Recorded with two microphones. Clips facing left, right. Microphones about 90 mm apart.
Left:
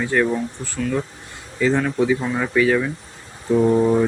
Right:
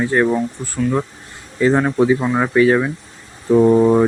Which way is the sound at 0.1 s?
30° right (ahead or behind).